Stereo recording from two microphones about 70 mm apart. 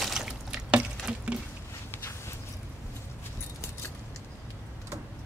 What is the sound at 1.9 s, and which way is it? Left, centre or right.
Walk, left.